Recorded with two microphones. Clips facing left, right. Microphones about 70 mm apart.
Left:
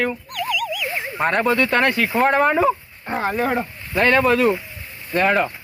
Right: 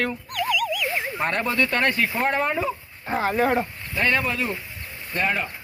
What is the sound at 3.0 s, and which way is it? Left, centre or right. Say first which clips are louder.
Speech: even; centre.